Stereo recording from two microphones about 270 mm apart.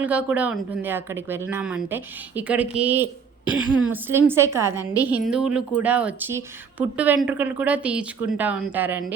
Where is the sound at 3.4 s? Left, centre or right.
Centre.